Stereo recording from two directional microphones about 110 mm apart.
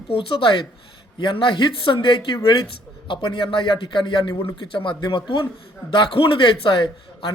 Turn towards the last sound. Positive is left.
turn(degrees=45)  # may be behind; listen again after turning